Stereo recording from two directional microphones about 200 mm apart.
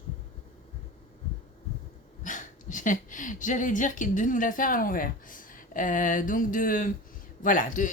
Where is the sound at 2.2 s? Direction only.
40° left (ahead or behind).